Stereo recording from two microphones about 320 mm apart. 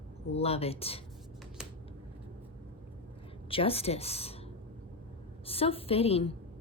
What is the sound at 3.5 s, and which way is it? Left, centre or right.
Speech, centre.